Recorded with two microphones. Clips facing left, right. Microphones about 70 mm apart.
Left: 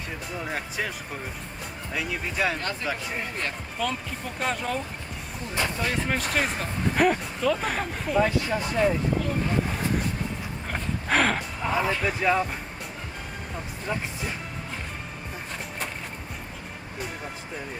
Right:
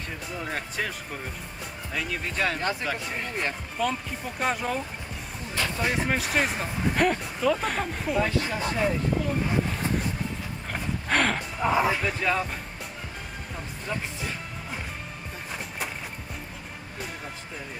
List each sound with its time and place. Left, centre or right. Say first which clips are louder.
0.3 s speech: even; centre
5.5 s speech: left 1 dB; centre
5.8 s speech: right 1 dB; centre
9.6 s music: left 1 dB; centre
10.7 s gasp: left 1 dB; centre
11.6 s speech: right 3 dB; centre
12.0 s speech: left 3 dB; centre
13.8 s speech: left 2 dB; centre